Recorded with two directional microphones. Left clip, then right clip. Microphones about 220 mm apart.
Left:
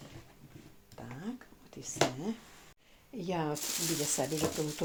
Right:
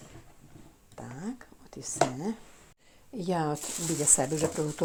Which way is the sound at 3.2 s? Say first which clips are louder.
Right 5 dB; 30° right (ahead or behind).